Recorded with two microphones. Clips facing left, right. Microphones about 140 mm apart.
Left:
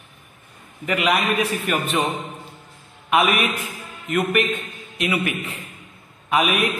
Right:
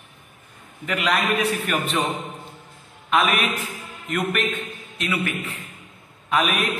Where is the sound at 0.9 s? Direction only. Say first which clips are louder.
Left 2 dB; 10° left (ahead or behind).